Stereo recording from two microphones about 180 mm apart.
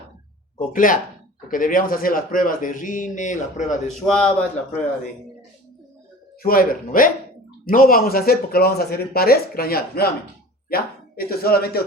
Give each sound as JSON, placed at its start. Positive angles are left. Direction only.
{"t": 0.6, "sound": "speech", "side_deg": 50}
{"t": 4.0, "sound": "a man's voice", "side_deg": 5}
{"t": 6.4, "sound": "speech", "side_deg": 55}